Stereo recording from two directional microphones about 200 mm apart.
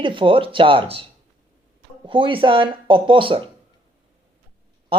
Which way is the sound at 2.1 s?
25° right (ahead or behind).